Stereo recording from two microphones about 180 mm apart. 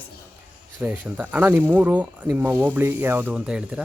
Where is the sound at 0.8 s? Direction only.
10° right (ahead or behind).